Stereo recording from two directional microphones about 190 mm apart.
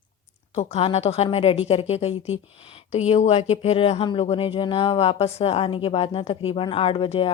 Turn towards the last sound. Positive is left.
turn(degrees=25)  # may be behind; listen again after turning